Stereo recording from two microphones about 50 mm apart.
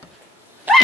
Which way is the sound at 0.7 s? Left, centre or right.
Right.